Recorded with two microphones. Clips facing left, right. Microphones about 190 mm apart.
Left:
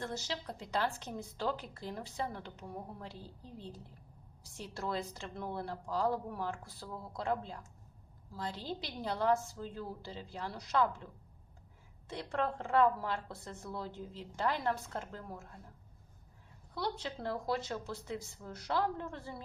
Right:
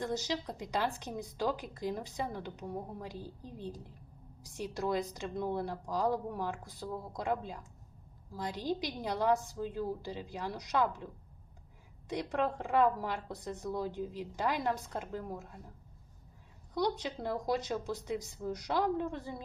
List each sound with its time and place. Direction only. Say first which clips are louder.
0.0 s speech: right 5 dB; 15° right (ahead or behind)
16.7 s speech: right 5 dB; 15° right (ahead or behind)